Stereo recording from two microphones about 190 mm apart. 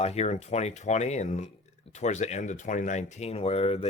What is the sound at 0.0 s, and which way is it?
Speech, 35° left (ahead or behind).